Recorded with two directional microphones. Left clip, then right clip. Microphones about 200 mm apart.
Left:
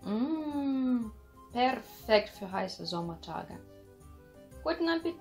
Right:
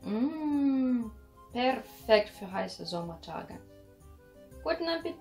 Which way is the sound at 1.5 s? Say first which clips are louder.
Even; 25° left (ahead or behind).